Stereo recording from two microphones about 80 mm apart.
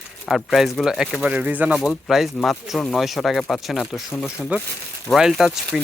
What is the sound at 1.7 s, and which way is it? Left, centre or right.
Speech, centre.